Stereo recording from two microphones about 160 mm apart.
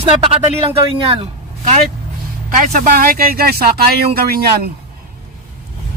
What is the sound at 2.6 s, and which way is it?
Speech, 60° right (ahead or behind).